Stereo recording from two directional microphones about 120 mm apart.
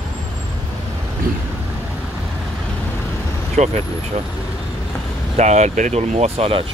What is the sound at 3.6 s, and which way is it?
Speech, 80° right.